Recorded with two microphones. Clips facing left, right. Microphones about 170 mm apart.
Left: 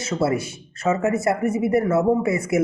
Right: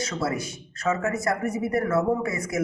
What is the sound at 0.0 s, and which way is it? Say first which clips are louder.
Speech: left 6 dB; 25° left (ahead or behind).